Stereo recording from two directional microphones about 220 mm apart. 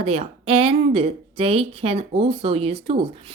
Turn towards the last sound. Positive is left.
turn(degrees=-25)  # may be behind; listen again after turning